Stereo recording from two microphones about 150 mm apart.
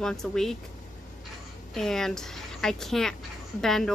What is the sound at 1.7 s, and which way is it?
Speech, 5° left (ahead or behind).